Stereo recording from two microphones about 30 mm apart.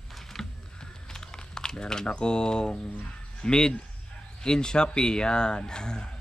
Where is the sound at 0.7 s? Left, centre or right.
Left.